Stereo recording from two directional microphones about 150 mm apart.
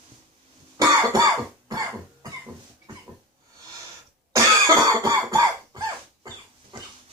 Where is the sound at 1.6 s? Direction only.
25° right (ahead or behind).